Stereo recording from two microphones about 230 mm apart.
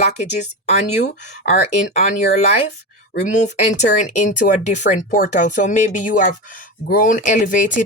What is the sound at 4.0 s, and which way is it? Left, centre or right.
Speech, left.